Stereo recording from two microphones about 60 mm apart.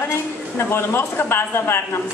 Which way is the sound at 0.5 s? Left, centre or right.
Left.